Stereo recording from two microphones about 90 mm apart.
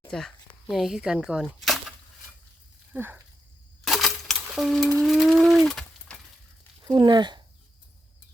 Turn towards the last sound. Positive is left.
turn(degrees=-55)  # may be behind; listen again after turning